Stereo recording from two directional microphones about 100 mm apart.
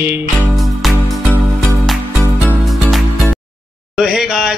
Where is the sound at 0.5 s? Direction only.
Centre (ahead or behind).